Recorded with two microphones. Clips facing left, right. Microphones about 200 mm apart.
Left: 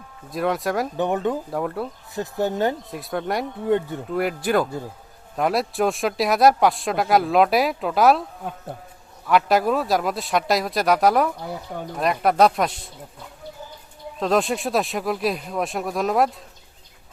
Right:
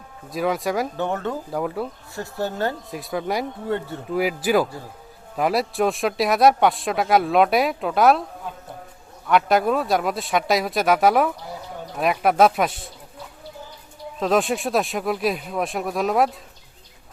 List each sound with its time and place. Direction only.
0.3 s speech: centre (ahead or behind)
0.9 s speech: 15° left (ahead or behind)
1.5 s speech: centre (ahead or behind)
2.1 s speech: 20° left (ahead or behind)
2.9 s speech: centre (ahead or behind)
3.7 s speech: 15° left (ahead or behind)
4.1 s speech: 5° right (ahead or behind)
9.2 s speech: centre (ahead or behind)
14.2 s speech: centre (ahead or behind)